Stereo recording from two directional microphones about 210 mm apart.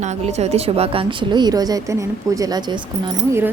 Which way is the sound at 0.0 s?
30° right (ahead or behind).